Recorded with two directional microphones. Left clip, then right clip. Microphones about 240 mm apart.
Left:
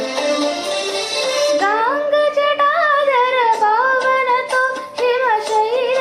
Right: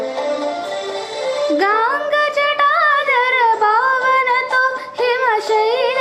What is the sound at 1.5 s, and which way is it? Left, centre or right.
Singing, right.